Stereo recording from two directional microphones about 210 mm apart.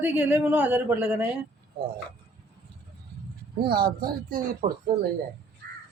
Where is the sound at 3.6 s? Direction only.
45° right (ahead or behind).